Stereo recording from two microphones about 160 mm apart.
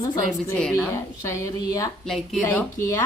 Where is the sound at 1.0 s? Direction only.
20° left (ahead or behind).